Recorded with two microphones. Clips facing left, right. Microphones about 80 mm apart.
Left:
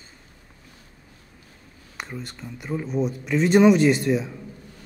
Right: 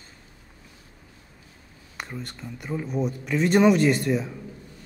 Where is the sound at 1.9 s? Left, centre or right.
Centre.